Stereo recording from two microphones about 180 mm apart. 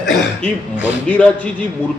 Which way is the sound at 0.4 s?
5° left (ahead or behind).